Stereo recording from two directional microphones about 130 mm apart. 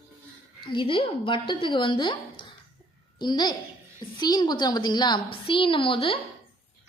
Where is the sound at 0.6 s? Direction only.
40° left (ahead or behind).